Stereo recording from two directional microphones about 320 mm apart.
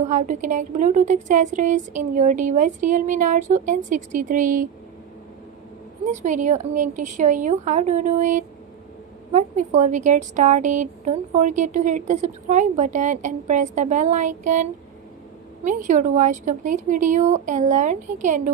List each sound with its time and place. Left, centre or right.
0.0 s a woman's voice: right
6.1 s a woman's voice: right